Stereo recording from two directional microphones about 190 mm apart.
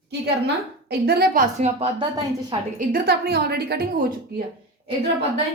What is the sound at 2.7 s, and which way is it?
A woman's voice, 55° right (ahead or behind).